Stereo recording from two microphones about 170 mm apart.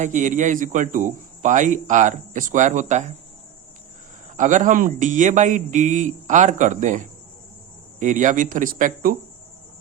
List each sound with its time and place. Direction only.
0.0 s speech: 45° right (ahead or behind)
4.4 s speech: 45° right (ahead or behind)